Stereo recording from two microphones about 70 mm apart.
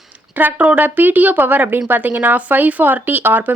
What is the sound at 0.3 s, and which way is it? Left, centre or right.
Speech, right.